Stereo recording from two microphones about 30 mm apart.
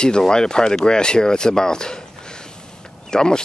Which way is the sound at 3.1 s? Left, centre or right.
Left.